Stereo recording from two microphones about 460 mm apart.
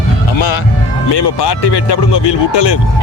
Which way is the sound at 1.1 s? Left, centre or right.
Left.